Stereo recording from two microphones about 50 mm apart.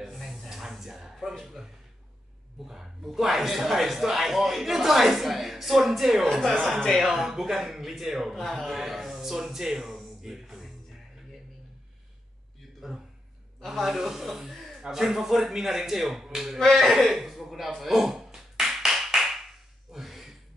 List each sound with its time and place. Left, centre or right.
0.0 s a sound: centre
1.4 s a man's voice: centre
13.7 s speech: centre
16.5 s a man's voice: centre
17.7 s clapping: centre
19.9 s beatboxing: centre